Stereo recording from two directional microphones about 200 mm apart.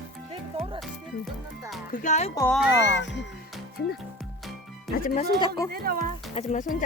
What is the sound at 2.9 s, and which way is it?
Speech, 65° left (ahead or behind).